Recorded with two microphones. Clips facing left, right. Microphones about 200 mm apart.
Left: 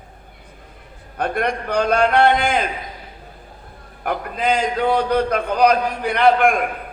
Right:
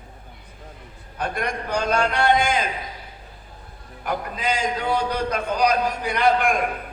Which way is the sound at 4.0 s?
55° left (ahead or behind).